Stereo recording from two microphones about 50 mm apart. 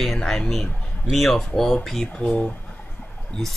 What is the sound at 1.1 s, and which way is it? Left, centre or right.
Speech, centre.